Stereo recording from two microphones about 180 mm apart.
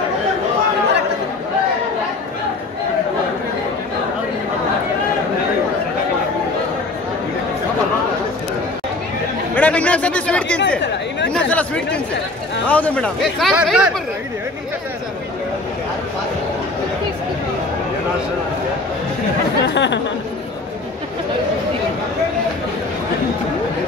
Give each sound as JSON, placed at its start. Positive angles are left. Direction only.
{"t": 9.6, "sound": "chatter", "side_deg": 5}
{"t": 12.6, "sound": "speech", "side_deg": 10}
{"t": 19.6, "sound": "speech", "side_deg": 75}